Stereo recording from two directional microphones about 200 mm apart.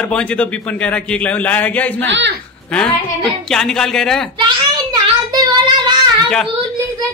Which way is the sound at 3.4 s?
Centre (ahead or behind).